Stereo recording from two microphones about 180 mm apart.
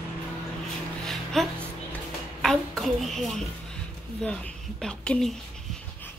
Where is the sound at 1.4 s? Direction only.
Centre (ahead or behind).